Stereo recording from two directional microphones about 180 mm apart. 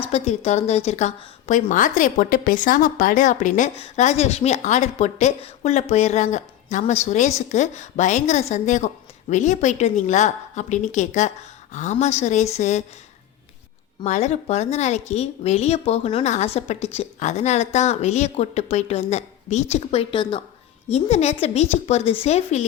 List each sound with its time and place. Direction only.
0.0 s a woman's voice: 35° left (ahead or behind)
14.0 s a woman's voice: 40° left (ahead or behind)